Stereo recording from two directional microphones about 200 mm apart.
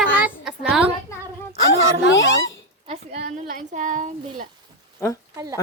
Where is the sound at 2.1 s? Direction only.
70° left (ahead or behind).